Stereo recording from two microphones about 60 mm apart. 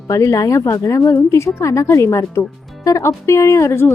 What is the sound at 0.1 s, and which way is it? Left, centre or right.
A woman's voice, left.